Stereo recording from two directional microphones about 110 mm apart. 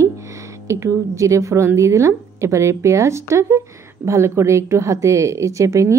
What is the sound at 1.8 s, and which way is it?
Speech, 25° right (ahead or behind).